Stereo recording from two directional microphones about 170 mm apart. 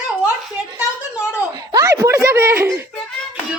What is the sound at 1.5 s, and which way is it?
A woman's voice, 20° right (ahead or behind).